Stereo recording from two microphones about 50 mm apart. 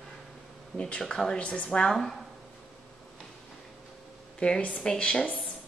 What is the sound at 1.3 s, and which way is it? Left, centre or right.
Speech, left.